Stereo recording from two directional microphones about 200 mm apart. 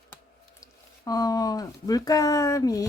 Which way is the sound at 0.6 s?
20° left (ahead or behind).